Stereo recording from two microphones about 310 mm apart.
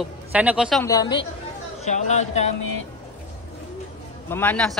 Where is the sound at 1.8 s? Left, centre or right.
Left.